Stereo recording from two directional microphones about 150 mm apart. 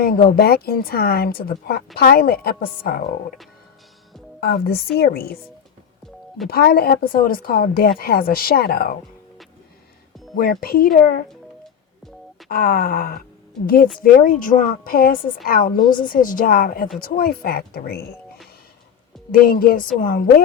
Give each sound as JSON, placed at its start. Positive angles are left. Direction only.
{"t": 0.0, "sound": "a woman's voice", "side_deg": 70}
{"t": 4.4, "sound": "a woman's voice", "side_deg": 90}
{"t": 6.5, "sound": "a woman's voice", "side_deg": 90}
{"t": 10.3, "sound": "a woman's voice", "side_deg": 85}
{"t": 12.5, "sound": "a woman's voice", "side_deg": 75}
{"t": 19.3, "sound": "a woman's voice", "side_deg": 75}